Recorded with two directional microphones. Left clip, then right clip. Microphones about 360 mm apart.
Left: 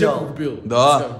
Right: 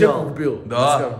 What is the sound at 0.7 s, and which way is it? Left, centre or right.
Speech, centre.